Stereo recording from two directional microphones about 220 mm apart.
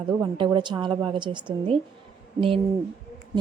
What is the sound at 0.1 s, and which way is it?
A woman's voice, 20° right (ahead or behind).